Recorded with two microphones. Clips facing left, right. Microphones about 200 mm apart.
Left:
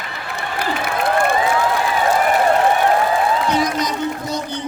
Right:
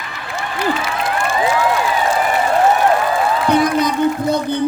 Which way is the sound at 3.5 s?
55° right (ahead or behind).